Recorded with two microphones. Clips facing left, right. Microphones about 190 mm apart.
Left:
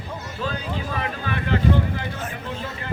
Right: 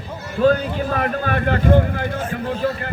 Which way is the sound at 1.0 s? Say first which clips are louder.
Right 7 dB; 50° right (ahead or behind).